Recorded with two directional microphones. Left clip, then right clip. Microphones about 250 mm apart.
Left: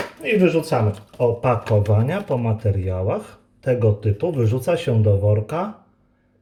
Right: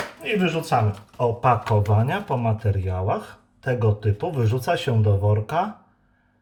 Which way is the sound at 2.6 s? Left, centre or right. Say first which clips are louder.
Left 2 dB; right.